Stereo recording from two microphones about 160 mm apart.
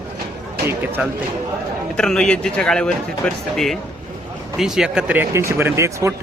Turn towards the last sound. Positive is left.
turn(degrees=-20)  # may be behind; listen again after turning